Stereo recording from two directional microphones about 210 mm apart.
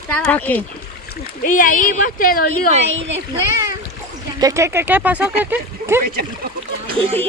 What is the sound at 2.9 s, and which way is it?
Speech, 60° right (ahead or behind).